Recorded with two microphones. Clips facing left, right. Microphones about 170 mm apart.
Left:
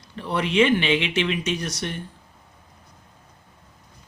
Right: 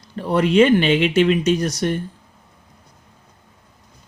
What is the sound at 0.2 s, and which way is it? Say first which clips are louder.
Speech: right 6 dB; 45° right (ahead or behind).